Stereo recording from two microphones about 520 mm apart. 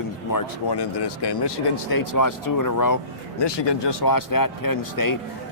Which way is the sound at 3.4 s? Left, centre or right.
Left.